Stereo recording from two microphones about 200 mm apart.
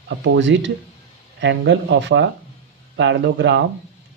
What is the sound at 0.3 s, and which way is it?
Speech, 65° right (ahead or behind).